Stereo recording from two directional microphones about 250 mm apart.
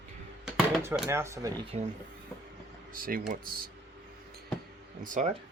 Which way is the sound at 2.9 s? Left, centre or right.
Right.